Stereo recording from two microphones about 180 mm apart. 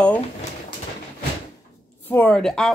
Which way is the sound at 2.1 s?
5° left (ahead or behind).